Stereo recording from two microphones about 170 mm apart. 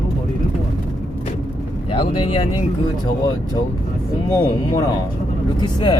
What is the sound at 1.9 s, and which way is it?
Speech, 30° left (ahead or behind).